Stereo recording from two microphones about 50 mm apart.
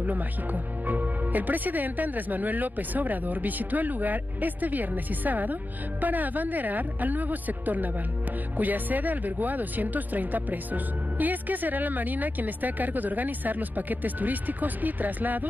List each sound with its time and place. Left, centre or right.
0.0 s speech: right